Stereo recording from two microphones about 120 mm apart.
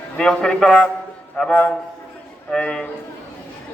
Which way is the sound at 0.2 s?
5° left (ahead or behind).